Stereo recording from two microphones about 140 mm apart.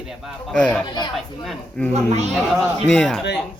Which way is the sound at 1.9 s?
50° right (ahead or behind).